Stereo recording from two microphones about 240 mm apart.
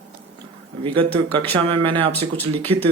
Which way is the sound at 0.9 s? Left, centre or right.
Right.